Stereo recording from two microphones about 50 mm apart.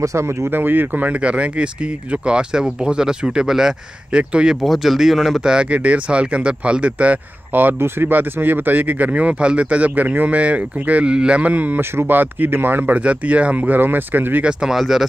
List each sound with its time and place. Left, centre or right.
0.0 s speech: right
0.5 s speech: right
1.2 s speech: right; by 4.2 s centre
4.2 s speech: right
4.6 s speech: centre
5.4 s speech: centre
5.7 s speech: right
7.5 s speech: right
11.8 s speech: right
12.9 s speech: right
14.7 s speech: centre